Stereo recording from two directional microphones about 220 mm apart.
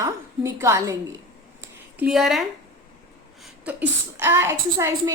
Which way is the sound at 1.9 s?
5° right (ahead or behind).